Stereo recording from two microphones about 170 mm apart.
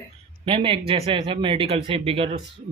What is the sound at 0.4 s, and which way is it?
Speech, 30° right (ahead or behind).